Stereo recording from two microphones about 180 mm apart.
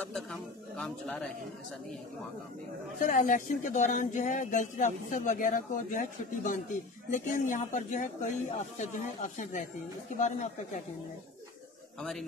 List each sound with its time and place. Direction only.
0.0 s speech: 5° left (ahead or behind)
3.0 s speech: 45° left (ahead or behind)
12.0 s speech: centre (ahead or behind)